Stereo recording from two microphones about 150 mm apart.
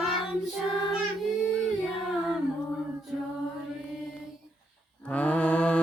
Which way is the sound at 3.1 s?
5° right (ahead or behind).